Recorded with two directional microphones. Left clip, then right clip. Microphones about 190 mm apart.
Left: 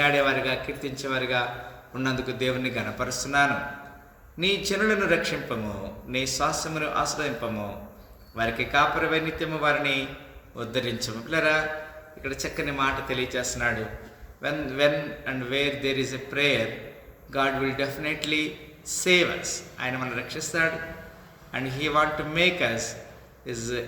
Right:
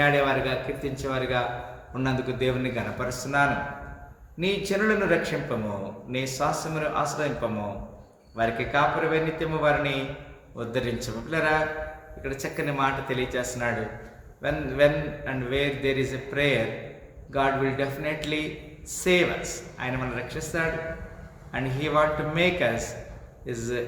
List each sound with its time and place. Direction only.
0.0 s a man's voice: 10° left (ahead or behind)
8.4 s a man's voice: 10° left (ahead or behind)